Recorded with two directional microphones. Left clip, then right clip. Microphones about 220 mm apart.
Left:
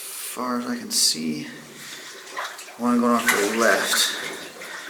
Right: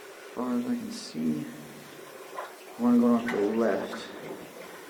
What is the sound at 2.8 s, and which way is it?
Speech, 20° right (ahead or behind).